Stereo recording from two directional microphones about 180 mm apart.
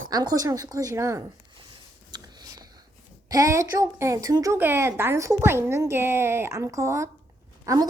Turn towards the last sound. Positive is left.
turn(degrees=-20)  # may be behind; listen again after turning